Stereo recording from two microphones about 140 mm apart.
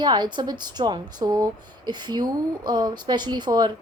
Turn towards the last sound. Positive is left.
turn(degrees=-30)  # may be behind; listen again after turning